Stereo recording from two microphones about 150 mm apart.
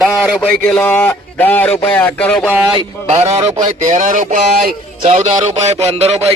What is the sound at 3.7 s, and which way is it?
A man's voice, 55° right (ahead or behind).